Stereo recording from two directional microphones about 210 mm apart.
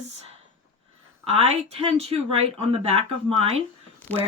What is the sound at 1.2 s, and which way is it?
Speech, 30° right (ahead or behind).